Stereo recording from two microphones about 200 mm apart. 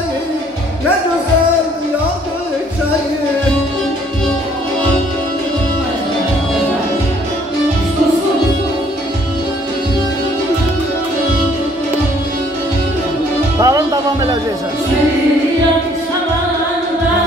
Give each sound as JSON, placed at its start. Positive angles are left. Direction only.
{"t": 13.6, "sound": "music", "side_deg": -20}